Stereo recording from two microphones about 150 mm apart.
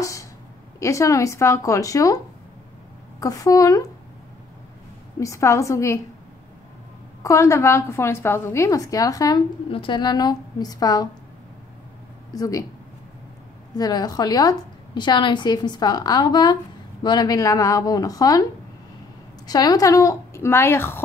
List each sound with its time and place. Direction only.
0.0 s a sound: 20° left (ahead or behind)
0.7 s a woman's voice: 20° left (ahead or behind)
3.2 s a woman's voice: 25° left (ahead or behind)
5.2 s a woman's voice: 20° left (ahead or behind)
7.2 s a woman's voice: 20° left (ahead or behind)
9.7 s a woman's voice: 35° left (ahead or behind)
12.4 s a woman's voice: 25° left (ahead or behind)
13.7 s a woman's voice: 25° left (ahead or behind)
19.4 s a woman's voice: 25° left (ahead or behind)